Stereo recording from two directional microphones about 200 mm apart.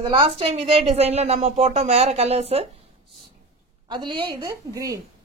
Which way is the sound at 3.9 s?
25° right (ahead or behind).